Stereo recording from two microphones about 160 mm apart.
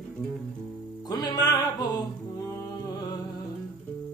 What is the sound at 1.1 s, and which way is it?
Music, 25° left (ahead or behind).